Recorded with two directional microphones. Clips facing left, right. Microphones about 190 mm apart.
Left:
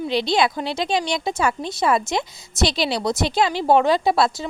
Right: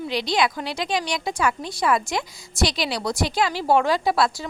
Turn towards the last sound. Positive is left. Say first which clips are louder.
# left 2 dB
turn(degrees=25)  # may be behind; listen again after turning